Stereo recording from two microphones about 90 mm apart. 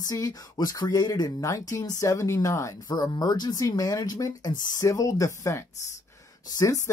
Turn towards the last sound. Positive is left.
turn(degrees=40)  # may be behind; listen again after turning